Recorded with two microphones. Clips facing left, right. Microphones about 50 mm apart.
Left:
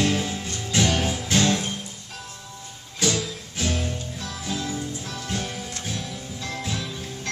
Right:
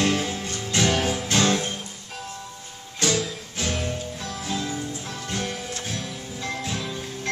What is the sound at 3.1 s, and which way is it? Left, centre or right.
Music, centre.